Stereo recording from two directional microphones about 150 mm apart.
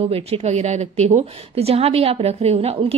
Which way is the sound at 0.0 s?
40° right (ahead or behind).